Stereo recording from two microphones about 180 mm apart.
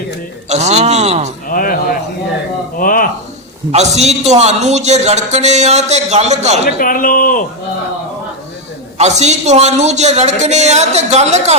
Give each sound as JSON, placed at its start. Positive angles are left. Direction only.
{"t": 0.4, "sound": "a man's voice", "side_deg": -40}
{"t": 1.5, "sound": "a sound", "side_deg": 50}
{"t": 3.7, "sound": "a man's voice", "side_deg": -35}
{"t": 6.7, "sound": "speech", "side_deg": 50}
{"t": 9.0, "sound": "a man's voice", "side_deg": -40}